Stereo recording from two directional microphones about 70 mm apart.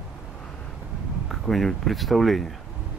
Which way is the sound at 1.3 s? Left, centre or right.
Centre.